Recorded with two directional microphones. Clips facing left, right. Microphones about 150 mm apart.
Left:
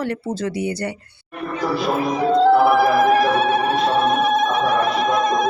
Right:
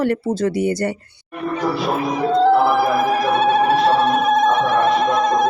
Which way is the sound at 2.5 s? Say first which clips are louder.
Left 1 dB; 25° right (ahead or behind).